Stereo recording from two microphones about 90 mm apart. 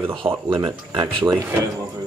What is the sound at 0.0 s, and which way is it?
Speech, 70° right (ahead or behind).